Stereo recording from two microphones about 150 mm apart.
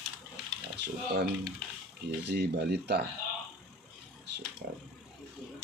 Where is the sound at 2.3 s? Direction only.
90° right.